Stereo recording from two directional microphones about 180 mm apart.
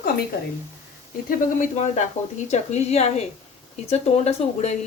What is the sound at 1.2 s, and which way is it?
Speech, 40° left (ahead or behind).